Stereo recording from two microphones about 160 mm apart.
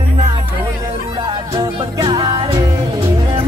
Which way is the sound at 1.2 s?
30° right (ahead or behind).